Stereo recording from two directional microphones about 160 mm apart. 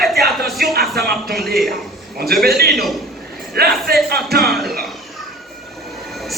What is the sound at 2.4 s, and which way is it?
Speech, 75° right (ahead or behind).